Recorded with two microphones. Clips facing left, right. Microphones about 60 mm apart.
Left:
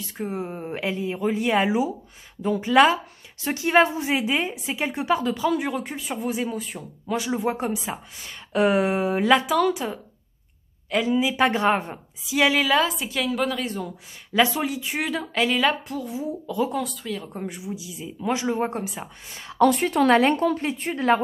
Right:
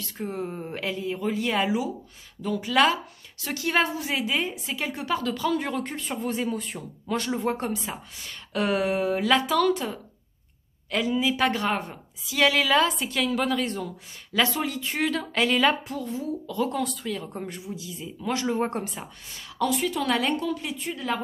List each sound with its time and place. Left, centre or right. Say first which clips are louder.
0.0 s a woman's voice: left 2 dB; centre
12.3 s a woman's voice: left 2 dB; centre
16.1 s speech: left 1 dB; centre
17.5 s a woman's voice: left 2 dB; centre
18.6 s speech: left 1 dB; centre
19.6 s speech: left 7 dB; left